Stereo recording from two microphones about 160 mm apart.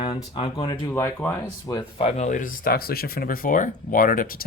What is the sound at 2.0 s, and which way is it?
Speech, 40° left (ahead or behind).